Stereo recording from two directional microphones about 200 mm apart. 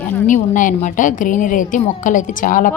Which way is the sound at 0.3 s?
40° left (ahead or behind).